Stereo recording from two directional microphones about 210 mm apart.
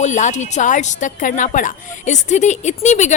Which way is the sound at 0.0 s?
35° left (ahead or behind).